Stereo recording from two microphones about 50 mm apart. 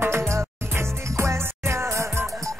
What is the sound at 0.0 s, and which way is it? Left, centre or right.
Music, right.